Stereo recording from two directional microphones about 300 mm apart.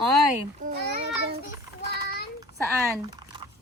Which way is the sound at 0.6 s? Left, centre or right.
Right.